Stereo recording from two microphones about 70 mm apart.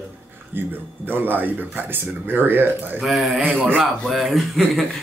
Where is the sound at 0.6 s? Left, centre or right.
Right.